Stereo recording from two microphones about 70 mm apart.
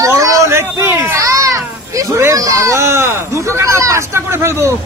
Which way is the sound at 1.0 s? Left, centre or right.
Right.